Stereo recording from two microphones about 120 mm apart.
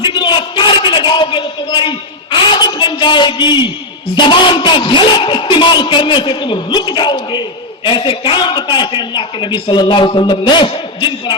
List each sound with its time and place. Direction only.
0.0 s speech: 40° left (ahead or behind)